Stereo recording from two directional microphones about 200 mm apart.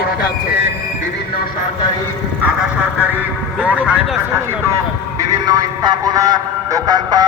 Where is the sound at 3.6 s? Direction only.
5° right (ahead or behind).